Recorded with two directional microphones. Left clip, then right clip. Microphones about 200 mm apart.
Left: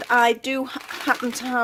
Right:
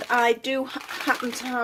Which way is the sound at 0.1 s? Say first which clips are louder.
Left 3 dB; 30° left (ahead or behind).